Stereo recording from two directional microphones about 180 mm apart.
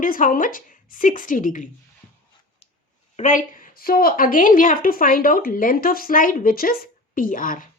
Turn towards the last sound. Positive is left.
turn(degrees=50)  # may be behind; listen again after turning